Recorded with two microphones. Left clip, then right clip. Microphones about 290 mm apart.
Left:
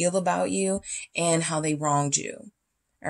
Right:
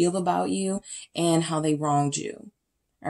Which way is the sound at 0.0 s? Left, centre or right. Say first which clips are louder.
Even; left.